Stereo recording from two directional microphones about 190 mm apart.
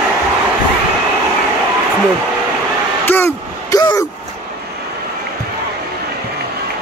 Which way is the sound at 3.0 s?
10° left (ahead or behind).